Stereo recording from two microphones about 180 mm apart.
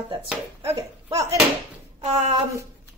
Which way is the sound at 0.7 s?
15° right (ahead or behind).